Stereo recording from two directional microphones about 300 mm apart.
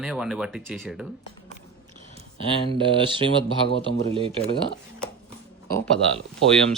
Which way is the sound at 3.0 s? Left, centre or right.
Centre.